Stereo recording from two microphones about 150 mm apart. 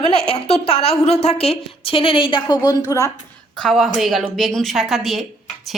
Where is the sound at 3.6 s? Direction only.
Centre (ahead or behind).